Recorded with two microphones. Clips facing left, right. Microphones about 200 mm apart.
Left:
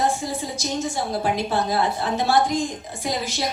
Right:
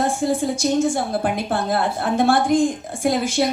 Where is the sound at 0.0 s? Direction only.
55° right (ahead or behind).